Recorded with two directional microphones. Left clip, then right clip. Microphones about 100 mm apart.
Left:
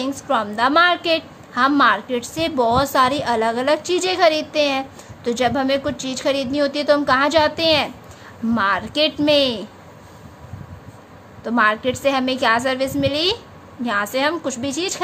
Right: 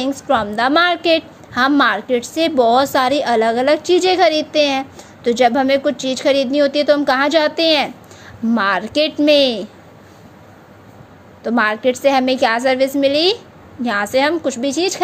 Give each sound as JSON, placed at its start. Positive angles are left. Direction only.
{"t": 0.0, "sound": "a woman's voice", "side_deg": -40}
{"t": 11.4, "sound": "a woman's voice", "side_deg": -45}